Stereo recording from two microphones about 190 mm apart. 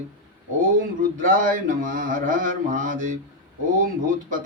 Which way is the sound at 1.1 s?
45° right (ahead or behind).